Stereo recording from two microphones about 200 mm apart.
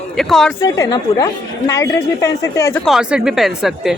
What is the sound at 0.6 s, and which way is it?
A woman's voice, 15° left (ahead or behind).